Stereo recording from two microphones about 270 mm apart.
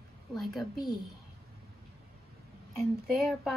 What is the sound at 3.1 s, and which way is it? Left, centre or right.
Speech, centre.